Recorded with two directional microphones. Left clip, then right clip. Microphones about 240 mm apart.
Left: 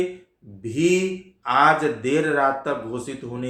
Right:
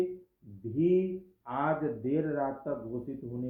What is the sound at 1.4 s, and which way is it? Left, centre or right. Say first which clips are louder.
Speech: left 14 dB; centre.